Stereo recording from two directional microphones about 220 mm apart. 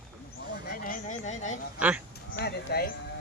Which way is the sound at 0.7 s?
35° left (ahead or behind).